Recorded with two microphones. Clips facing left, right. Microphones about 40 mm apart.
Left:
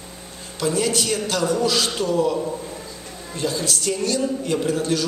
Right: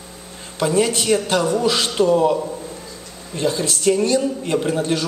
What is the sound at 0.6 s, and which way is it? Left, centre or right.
A man's voice, right.